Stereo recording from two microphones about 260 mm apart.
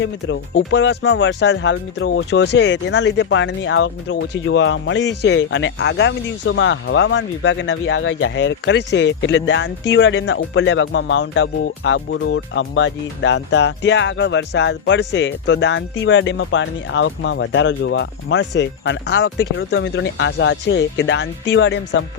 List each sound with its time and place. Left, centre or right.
0.0 s speech: left